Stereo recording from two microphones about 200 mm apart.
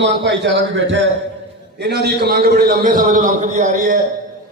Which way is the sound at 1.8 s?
55° right (ahead or behind).